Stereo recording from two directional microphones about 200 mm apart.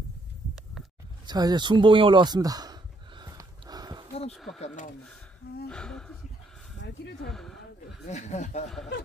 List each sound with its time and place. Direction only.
1.2 s a sound: 20° right (ahead or behind)
4.3 s speech: centre (ahead or behind)
4.6 s speech: 35° left (ahead or behind)
5.7 s speech: 5° left (ahead or behind)
6.8 s a sound: 60° left (ahead or behind)
7.2 s speech: centre (ahead or behind)
8.1 s speech: 35° left (ahead or behind)